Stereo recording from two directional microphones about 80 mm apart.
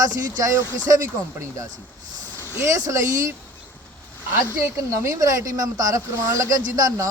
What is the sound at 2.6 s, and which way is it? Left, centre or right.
Speech, right.